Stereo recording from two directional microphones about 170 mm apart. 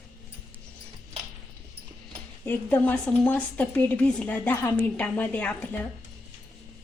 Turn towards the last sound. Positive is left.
turn(degrees=10)  # may be behind; listen again after turning